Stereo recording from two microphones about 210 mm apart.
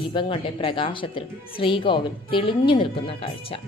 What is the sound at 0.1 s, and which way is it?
A woman's voice, 25° left (ahead or behind).